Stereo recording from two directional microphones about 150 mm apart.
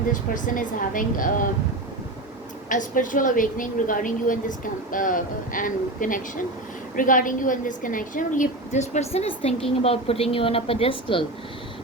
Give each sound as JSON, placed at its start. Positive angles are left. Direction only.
{"t": 0.1, "sound": "a woman's voice", "side_deg": 60}
{"t": 2.6, "sound": "a woman's voice", "side_deg": 60}